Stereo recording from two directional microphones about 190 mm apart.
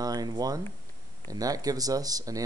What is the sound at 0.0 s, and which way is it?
Speech, 20° right (ahead or behind).